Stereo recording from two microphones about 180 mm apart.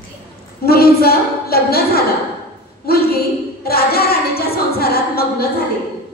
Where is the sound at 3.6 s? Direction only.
60° left (ahead or behind).